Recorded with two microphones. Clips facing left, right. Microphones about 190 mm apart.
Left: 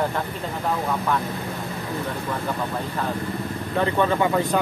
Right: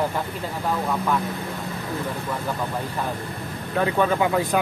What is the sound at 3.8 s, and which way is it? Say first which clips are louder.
Speech: even; 5° right (ahead or behind).